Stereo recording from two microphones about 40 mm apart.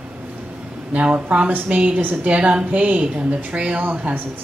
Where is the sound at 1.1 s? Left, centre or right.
Right.